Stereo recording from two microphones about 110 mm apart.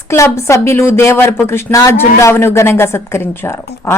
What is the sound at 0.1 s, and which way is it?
Speech, 25° left (ahead or behind).